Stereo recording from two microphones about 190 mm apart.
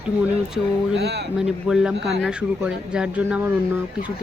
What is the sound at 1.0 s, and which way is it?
Speech, 60° right (ahead or behind).